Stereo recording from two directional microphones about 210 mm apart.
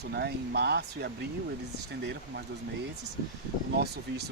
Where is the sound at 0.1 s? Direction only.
55° right (ahead or behind).